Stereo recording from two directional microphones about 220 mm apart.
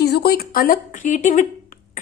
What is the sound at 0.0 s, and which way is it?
A woman's voice, 45° left (ahead or behind).